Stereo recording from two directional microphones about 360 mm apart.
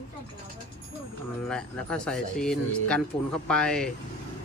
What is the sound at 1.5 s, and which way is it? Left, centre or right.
Speech, centre.